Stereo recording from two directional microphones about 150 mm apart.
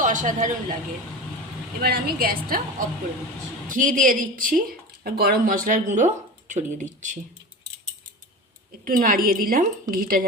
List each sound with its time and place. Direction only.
0.0 s speech: 60° right (ahead or behind)
1.8 s a woman's voice: 85° right
3.7 s speech: 60° right (ahead or behind)
5.0 s speech: 80° right; by 7.2 s 55° right (ahead or behind)
8.8 s a woman's voice: 65° right (ahead or behind)